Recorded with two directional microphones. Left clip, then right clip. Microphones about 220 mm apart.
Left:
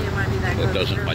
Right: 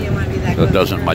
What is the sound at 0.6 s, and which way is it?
Speech, 35° right (ahead or behind).